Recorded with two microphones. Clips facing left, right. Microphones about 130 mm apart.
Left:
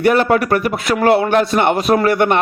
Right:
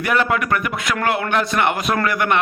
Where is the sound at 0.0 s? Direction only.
35° left (ahead or behind).